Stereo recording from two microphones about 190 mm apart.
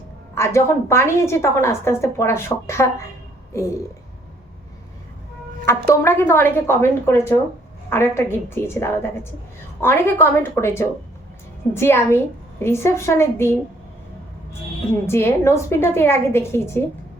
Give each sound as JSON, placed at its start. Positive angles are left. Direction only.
{"t": 0.3, "sound": "a woman's voice", "side_deg": 15}
{"t": 5.6, "sound": "a woman's voice", "side_deg": 15}
{"t": 15.0, "sound": "a woman's voice", "side_deg": 15}